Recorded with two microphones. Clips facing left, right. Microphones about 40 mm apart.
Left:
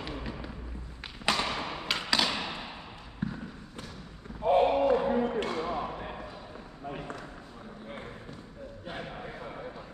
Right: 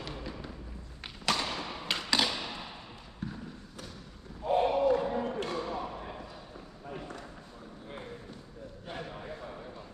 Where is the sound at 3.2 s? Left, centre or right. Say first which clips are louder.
Left 5 dB; centre.